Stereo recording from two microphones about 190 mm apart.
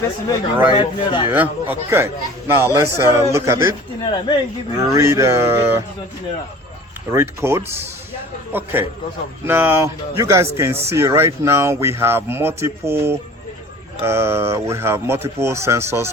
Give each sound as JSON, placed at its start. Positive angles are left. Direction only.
{"t": 0.3, "sound": "speech", "side_deg": 25}
{"t": 1.3, "sound": "speech", "side_deg": -10}
{"t": 4.8, "sound": "speech", "side_deg": -15}
{"t": 7.1, "sound": "speech", "side_deg": -15}